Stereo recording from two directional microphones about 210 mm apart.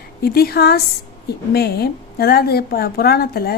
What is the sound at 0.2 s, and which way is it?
A woman's voice, 45° left (ahead or behind).